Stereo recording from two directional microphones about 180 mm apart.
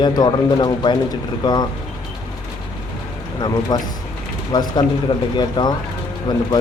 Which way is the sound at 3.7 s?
25° left (ahead or behind).